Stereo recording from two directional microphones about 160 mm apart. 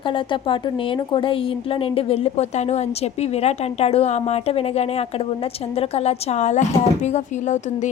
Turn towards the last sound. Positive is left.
turn(degrees=50)  # may be behind; listen again after turning